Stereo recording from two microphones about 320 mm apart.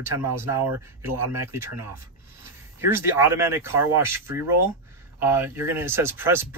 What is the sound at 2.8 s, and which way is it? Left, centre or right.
Speech, centre.